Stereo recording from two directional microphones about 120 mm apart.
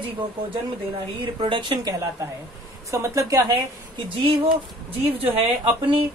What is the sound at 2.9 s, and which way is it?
Speech, 25° right (ahead or behind).